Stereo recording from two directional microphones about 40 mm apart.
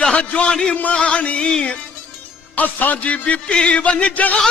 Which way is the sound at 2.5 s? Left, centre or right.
Left.